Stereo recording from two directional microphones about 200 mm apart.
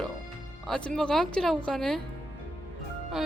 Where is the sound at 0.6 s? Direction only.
5° left (ahead or behind).